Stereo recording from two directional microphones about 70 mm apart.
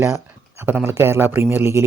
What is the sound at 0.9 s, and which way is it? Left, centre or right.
Speech, right.